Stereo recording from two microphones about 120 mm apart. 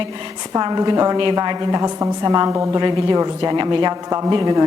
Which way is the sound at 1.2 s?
40° right (ahead or behind).